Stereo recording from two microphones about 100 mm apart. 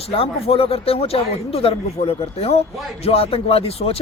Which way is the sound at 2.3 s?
90° left.